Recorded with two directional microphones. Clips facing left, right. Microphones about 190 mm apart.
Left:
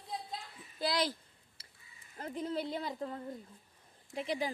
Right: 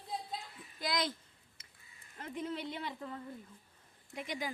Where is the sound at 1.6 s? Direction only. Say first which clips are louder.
Left 4 dB; 35° left (ahead or behind).